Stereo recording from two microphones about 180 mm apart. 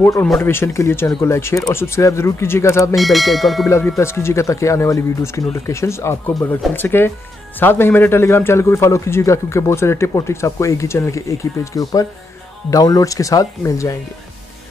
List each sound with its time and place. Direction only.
0.0 s a man's voice: 15° left (ahead or behind)
3.0 s speech: centre (ahead or behind)
3.6 s a man's voice: 15° left (ahead or behind)